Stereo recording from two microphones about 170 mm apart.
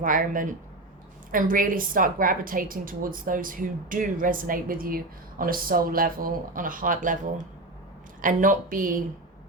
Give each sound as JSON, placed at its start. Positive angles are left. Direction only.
{"t": 0.0, "sound": "a woman's voice", "side_deg": -50}
{"t": 8.2, "sound": "speech", "side_deg": -50}